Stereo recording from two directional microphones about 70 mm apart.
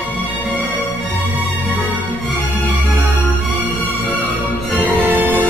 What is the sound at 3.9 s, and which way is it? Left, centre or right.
Music, right.